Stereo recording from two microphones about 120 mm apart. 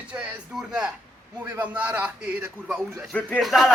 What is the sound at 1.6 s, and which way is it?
Speech, 10° right (ahead or behind).